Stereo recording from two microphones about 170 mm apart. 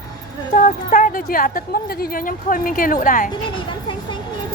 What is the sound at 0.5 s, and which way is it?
A woman's voice, 50° left (ahead or behind).